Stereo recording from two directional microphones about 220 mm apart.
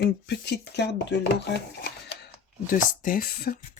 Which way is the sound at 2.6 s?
40° left (ahead or behind).